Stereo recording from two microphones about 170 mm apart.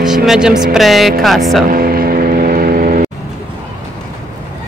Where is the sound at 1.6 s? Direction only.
60° right (ahead or behind).